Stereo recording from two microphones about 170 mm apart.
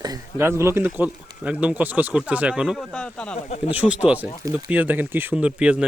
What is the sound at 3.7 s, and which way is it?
Speech, 10° right (ahead or behind).